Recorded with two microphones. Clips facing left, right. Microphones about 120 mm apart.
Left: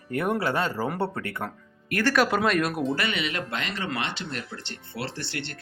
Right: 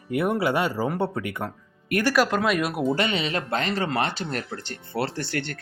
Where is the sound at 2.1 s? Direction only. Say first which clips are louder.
Even; centre (ahead or behind).